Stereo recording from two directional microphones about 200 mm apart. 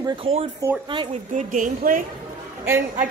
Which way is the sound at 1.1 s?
40° right (ahead or behind).